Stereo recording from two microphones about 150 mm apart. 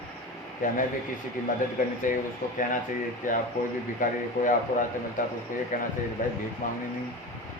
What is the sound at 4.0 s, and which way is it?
Speech, 60° left (ahead or behind).